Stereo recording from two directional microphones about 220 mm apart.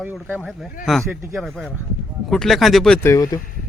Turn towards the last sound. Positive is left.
turn(degrees=15)  # may be behind; listen again after turning